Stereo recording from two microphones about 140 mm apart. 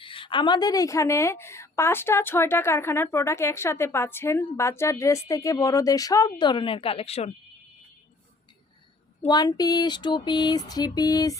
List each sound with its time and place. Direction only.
0.0 s a woman's voice: 40° left (ahead or behind)
9.2 s a woman's voice: 30° left (ahead or behind)